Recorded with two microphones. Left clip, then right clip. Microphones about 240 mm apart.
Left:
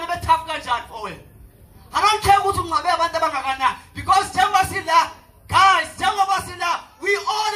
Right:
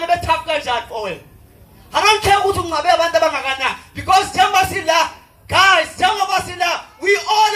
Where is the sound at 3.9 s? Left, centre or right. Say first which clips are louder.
Right 6 dB; left.